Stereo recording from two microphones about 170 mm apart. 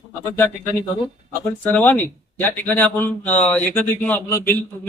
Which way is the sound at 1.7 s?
10° left (ahead or behind).